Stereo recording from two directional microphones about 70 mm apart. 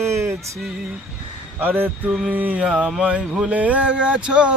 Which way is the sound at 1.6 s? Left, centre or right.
Right.